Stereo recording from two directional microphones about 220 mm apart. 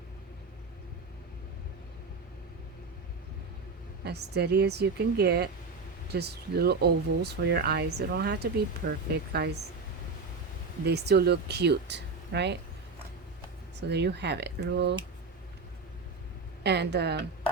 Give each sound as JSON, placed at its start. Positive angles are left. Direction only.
{"t": 4.0, "sound": "speech", "side_deg": -50}
{"t": 10.8, "sound": "speech", "side_deg": -50}
{"t": 13.7, "sound": "speech", "side_deg": -50}
{"t": 16.6, "sound": "speech", "side_deg": -50}